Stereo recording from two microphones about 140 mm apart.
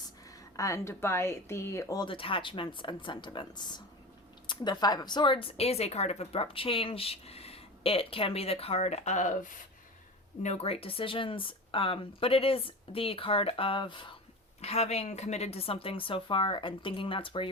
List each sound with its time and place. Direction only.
0.3 s speech: 20° left (ahead or behind)
2.0 s speech: 40° left (ahead or behind); by 9.5 s 65° left (ahead or behind)
10.4 s speech: 50° left (ahead or behind)
14.6 s speech: 50° left (ahead or behind)